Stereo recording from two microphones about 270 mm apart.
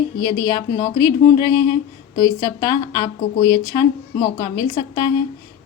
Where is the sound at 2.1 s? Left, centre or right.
Centre.